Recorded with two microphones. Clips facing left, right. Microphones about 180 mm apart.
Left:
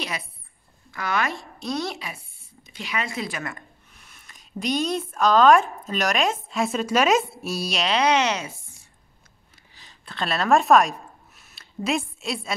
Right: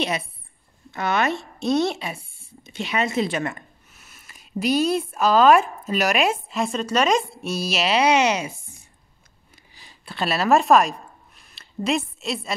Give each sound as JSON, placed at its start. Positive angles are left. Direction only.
{"t": 0.9, "sound": "speech", "side_deg": -25}
{"t": 3.9, "sound": "speech", "side_deg": -5}
{"t": 9.8, "sound": "a sound", "side_deg": -10}